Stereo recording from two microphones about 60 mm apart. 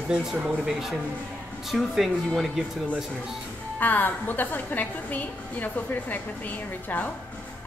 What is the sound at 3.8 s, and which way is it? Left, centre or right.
A woman's voice, left.